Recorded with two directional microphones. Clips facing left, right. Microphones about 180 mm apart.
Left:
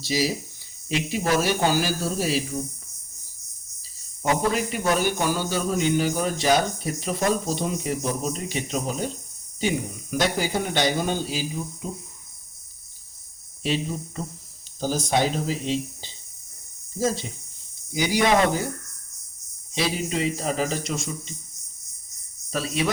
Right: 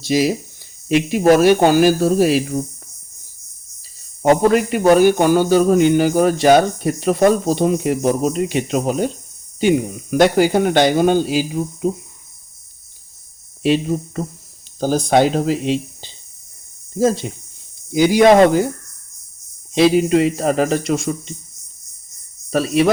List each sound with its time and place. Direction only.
0.0 s speech: 55° right (ahead or behind)
4.2 s speech: 65° right (ahead or behind)
13.6 s speech: 60° right (ahead or behind)
19.7 s speech: 60° right (ahead or behind)
22.4 s speech: 65° right (ahead or behind)